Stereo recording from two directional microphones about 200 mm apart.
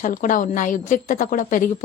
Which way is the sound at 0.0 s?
40° left (ahead or behind).